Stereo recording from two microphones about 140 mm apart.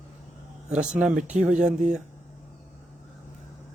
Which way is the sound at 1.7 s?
65° right (ahead or behind).